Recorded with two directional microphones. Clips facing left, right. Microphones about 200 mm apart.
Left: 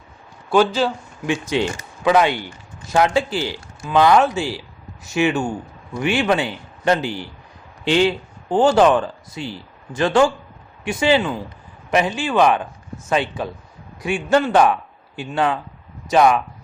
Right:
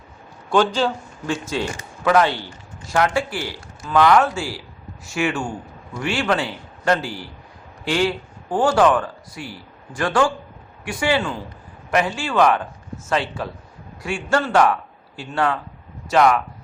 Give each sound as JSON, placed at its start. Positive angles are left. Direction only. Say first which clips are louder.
{"t": 0.5, "sound": "a man's voice", "louder": "left 2 dB", "side_deg": 5}